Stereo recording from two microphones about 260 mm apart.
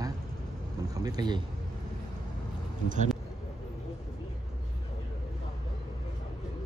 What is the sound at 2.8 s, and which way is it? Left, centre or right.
Speech, right.